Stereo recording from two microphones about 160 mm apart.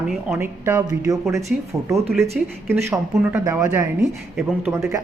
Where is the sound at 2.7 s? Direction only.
20° right (ahead or behind).